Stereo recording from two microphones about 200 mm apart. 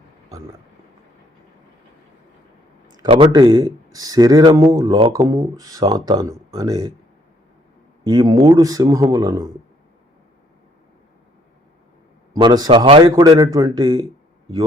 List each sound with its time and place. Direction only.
2.8 s a man's voice: 20° right (ahead or behind)
8.0 s a man's voice: 20° right (ahead or behind)
12.3 s speech: 20° right (ahead or behind)